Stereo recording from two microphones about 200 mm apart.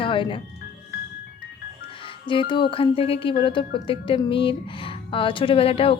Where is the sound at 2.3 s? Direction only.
25° left (ahead or behind).